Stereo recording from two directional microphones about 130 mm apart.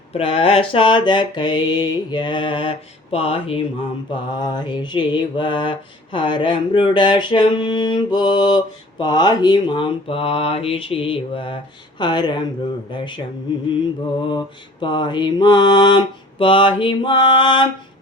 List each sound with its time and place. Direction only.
0.1 s mantra: 45° left (ahead or behind)
4.1 s mantra: 35° left (ahead or behind)